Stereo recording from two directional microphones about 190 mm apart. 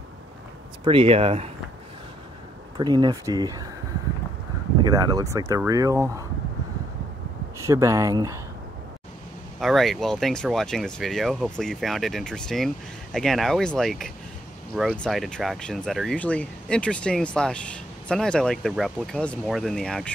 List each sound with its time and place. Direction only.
0.8 s speech: 30° right (ahead or behind)
2.8 s speech: 20° right (ahead or behind)
4.8 s speech: 20° right (ahead or behind)
7.6 s speech: 15° right (ahead or behind)
9.6 s speech: centre (ahead or behind)